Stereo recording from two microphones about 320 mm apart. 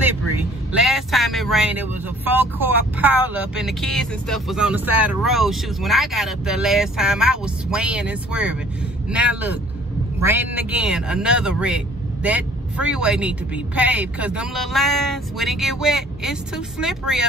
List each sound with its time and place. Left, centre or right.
0.7 s speech: centre